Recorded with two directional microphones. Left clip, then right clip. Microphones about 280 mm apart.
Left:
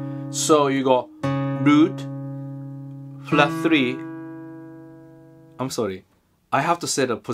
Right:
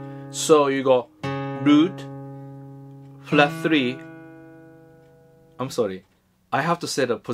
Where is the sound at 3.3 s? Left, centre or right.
Centre.